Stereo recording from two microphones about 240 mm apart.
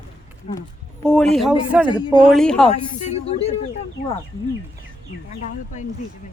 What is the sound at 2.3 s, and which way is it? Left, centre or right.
Speech, centre.